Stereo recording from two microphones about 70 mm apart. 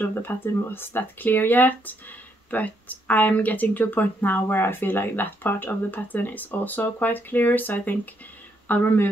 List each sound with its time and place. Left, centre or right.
0.0 s speech: left